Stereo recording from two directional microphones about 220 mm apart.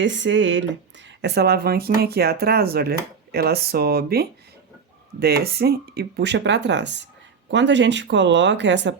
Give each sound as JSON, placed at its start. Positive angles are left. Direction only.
{"t": 0.0, "sound": "speech", "side_deg": -55}